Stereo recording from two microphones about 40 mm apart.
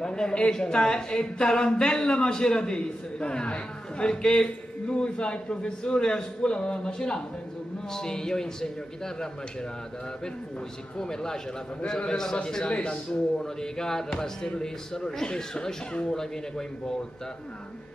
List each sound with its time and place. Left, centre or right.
0.0 s speech: centre
11.0 s speech: centre
12.6 s speech: left